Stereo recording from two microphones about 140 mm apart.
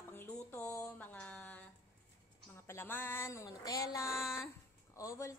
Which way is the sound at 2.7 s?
15° left (ahead or behind).